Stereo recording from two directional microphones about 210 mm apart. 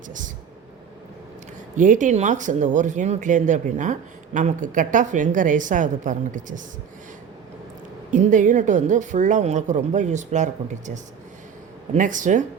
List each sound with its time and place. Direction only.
1.7 s a woman's voice: 35° right (ahead or behind)
8.1 s a woman's voice: 35° right (ahead or behind)